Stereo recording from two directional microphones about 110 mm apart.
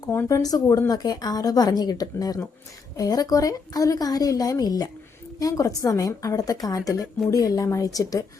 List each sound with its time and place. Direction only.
0.0 s a woman's voice: 25° left (ahead or behind)